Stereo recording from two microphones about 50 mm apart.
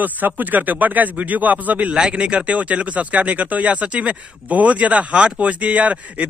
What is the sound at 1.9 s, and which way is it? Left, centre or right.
Speech, centre.